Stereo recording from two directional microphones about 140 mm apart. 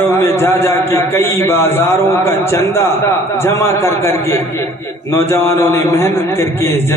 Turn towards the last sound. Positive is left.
turn(degrees=15)  # may be behind; listen again after turning